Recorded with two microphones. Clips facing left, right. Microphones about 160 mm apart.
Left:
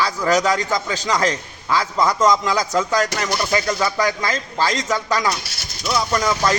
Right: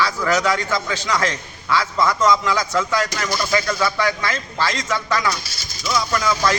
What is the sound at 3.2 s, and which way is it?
A man's voice, 30° left (ahead or behind).